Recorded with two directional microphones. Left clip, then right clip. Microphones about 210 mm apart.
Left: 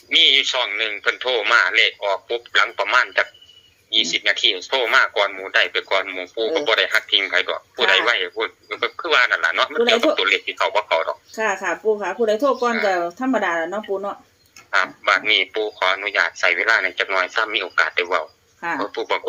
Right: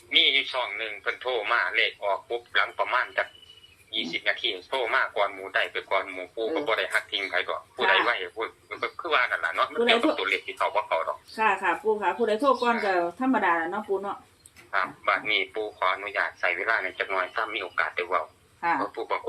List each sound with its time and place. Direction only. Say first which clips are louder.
0.1 s speech: left 7 dB; 45° left (ahead or behind)